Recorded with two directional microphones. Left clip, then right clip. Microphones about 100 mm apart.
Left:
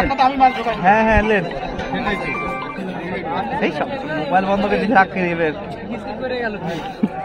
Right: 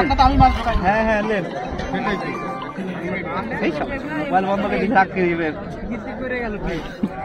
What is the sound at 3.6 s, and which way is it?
Speech, 90° left.